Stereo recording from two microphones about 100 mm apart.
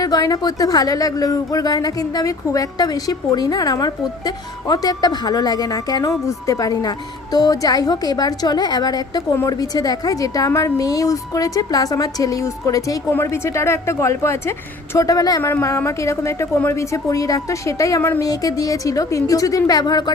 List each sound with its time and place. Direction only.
0.0 s a woman's voice: 40° left (ahead or behind)